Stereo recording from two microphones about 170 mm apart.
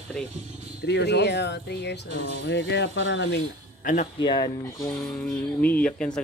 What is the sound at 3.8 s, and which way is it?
Speech, 50° left (ahead or behind).